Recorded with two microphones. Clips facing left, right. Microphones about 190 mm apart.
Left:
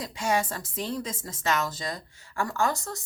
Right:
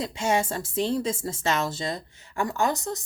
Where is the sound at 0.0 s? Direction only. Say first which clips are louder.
Right 2 dB; 25° right (ahead or behind).